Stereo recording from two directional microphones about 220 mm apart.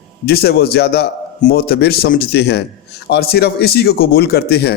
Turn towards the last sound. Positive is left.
turn(degrees=50)  # may be behind; listen again after turning